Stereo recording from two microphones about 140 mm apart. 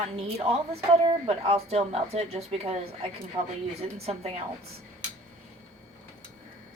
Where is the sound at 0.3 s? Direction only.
45° right (ahead or behind).